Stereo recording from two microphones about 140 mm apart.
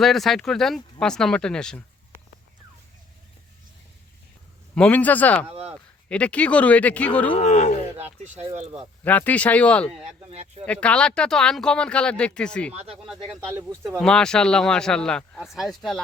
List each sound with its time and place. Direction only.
0.0 s speech: centre (ahead or behind)
4.7 s speech: 10° left (ahead or behind)
5.5 s a sound: 45° right (ahead or behind)
6.1 s speech: 10° left (ahead or behind)
7.3 s speech: 55° left (ahead or behind)
9.0 s speech: 10° left (ahead or behind)
10.1 s speech: 50° right (ahead or behind)
10.7 s speech: 10° left (ahead or behind)
12.7 s speech: 45° right (ahead or behind)
14.0 s speech: 5° left (ahead or behind)